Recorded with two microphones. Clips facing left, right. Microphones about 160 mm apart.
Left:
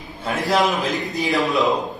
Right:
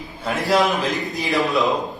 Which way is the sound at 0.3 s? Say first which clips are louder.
Right 1 dB; centre (ahead or behind).